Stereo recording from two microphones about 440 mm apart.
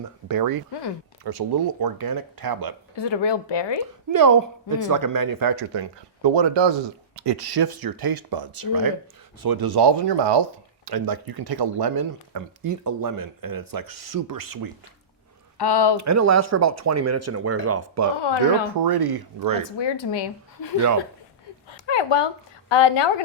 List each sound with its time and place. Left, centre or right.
0.3 s speech: right
2.9 s speech: left
4.1 s speech: right
6.2 s speech: right
10.8 s speech: right
15.5 s speech: left
16.0 s speech: right
18.7 s speech: right
19.8 s speech: left
21.8 s speech: left